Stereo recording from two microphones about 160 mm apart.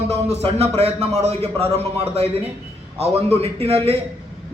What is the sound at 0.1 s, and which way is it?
A man's voice, 40° right (ahead or behind).